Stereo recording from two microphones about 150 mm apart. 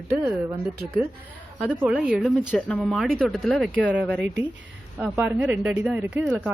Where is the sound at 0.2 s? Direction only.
10° right (ahead or behind).